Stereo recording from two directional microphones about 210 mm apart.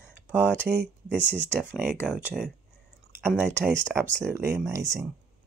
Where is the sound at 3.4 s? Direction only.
10° right (ahead or behind).